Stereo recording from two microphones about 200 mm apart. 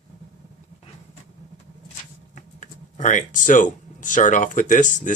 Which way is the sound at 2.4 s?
40° left (ahead or behind).